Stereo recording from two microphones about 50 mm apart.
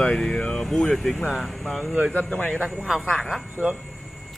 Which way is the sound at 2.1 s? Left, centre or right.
Left.